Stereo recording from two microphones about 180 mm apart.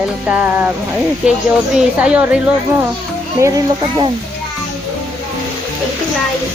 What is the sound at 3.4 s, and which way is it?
Speech, 20° right (ahead or behind).